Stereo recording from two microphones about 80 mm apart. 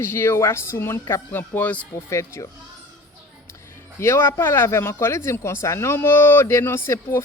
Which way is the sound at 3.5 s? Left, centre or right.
Left.